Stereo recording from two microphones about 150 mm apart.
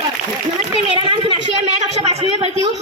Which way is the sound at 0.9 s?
35° right (ahead or behind).